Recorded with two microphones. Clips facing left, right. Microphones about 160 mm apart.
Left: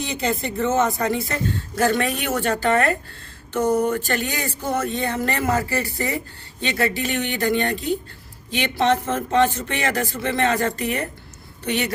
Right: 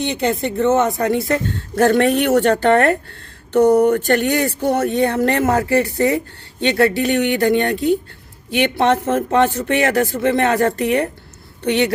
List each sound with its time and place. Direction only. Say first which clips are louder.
0.0 s speech: right 5 dB; 65° right (ahead or behind)